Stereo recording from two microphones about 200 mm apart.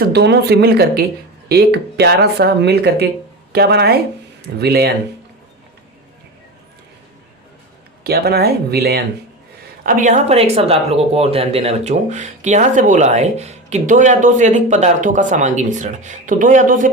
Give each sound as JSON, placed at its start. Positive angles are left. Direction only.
{"t": 0.0, "sound": "speech", "side_deg": -55}
{"t": 8.0, "sound": "speech", "side_deg": -50}
{"t": 9.8, "sound": "speech", "side_deg": -40}